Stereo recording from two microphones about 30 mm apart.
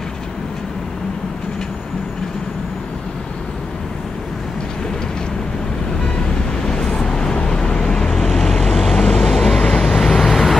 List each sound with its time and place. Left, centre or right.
6.6 s vehicle: left; by 10.6 s centre